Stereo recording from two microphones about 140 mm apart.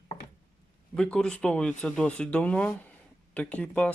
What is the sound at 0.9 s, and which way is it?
Speech, 5° left (ahead or behind).